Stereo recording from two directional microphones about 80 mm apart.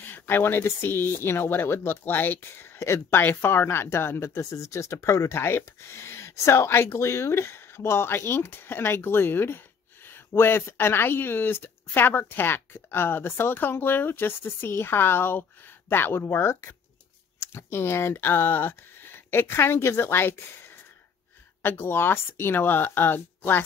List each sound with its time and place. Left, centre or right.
0.0 s speech: left